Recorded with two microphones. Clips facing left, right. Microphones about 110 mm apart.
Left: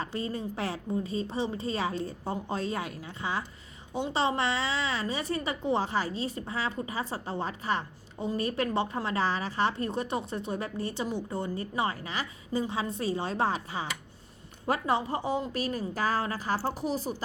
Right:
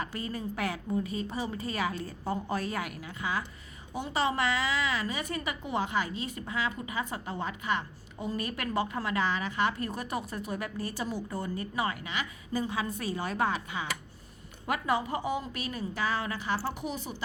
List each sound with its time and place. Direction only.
0.0 s a woman's voice: 25° left (ahead or behind)